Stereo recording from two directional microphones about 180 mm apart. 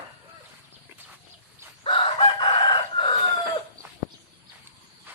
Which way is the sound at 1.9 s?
30° left (ahead or behind).